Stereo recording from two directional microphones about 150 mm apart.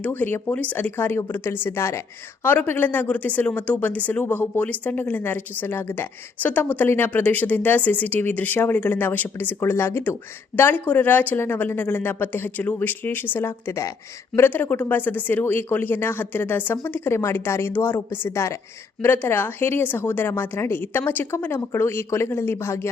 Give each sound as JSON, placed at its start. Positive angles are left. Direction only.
{"t": 0.0, "sound": "speech", "side_deg": 10}